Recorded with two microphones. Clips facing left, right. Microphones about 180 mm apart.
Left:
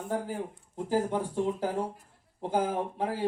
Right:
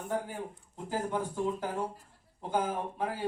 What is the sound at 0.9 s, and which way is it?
Speech, 30° left (ahead or behind).